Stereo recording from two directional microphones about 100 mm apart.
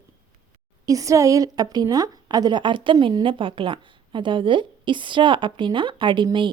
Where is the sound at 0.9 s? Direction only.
35° right (ahead or behind).